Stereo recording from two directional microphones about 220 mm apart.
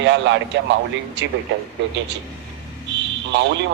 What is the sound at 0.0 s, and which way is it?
Speech, 55° right (ahead or behind).